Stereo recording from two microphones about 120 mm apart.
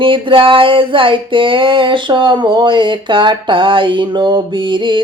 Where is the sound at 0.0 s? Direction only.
45° right (ahead or behind).